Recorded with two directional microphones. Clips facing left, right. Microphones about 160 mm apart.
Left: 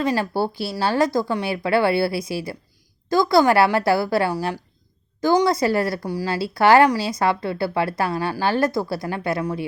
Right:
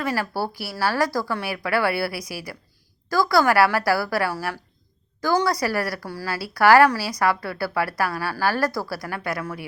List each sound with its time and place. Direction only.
0.0 s a woman's voice: 25° left (ahead or behind)